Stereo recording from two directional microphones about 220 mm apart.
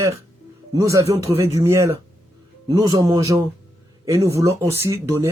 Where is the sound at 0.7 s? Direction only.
15° right (ahead or behind).